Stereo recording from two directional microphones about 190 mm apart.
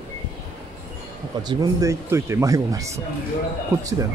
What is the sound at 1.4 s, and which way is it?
Speech, 20° right (ahead or behind).